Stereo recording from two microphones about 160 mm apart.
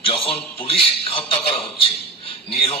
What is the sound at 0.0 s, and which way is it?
Speech, 35° left (ahead or behind).